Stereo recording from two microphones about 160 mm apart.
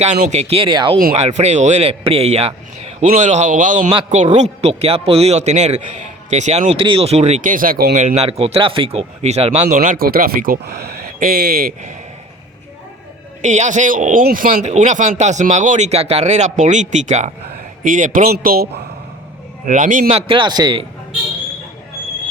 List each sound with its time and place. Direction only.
0.0 s speech: 45° right (ahead or behind)
1.1 s speech: 45° right (ahead or behind)
6.6 s speech: 30° right (ahead or behind); by 7.9 s 65° right (ahead or behind)
7.9 s speech: 45° right (ahead or behind)
9.6 s speech: 55° right (ahead or behind); by 11.7 s 75° right (ahead or behind)
13.4 s speech: 50° right (ahead or behind)
14.7 s a man's voice: 50° right (ahead or behind)
18.3 s speech: 75° right (ahead or behind)
19.6 s speech: 50° right (ahead or behind)
20.1 s speech: 35° right (ahead or behind)